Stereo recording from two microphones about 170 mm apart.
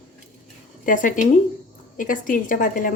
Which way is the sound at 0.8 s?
50° left (ahead or behind).